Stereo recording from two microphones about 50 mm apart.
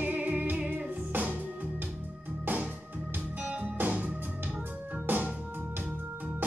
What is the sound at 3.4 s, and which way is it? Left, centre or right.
Music, right.